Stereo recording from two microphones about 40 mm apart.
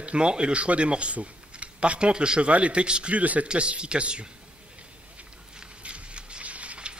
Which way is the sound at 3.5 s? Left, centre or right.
Right.